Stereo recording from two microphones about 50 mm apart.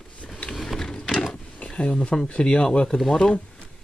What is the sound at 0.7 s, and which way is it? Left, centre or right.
Mechanisms, centre.